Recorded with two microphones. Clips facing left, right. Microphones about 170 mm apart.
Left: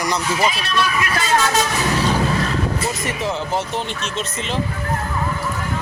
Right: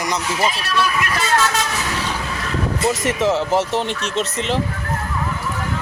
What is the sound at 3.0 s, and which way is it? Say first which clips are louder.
Speech: right 5 dB; 80° right.